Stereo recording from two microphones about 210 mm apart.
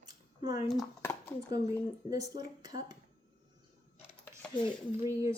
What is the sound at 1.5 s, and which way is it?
Speech, 15° right (ahead or behind).